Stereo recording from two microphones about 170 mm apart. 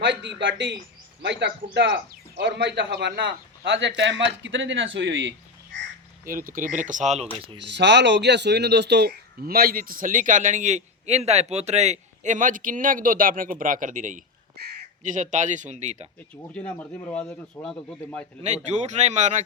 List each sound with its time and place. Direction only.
0.0 s speech: 90° right
6.2 s speech: 55° right (ahead or behind)
7.3 s speech: 30° right (ahead or behind)
7.6 s speech: 90° right; by 16.0 s 45° right (ahead or behind)
16.3 s speech: 5° left (ahead or behind)
18.4 s speech: 40° right (ahead or behind)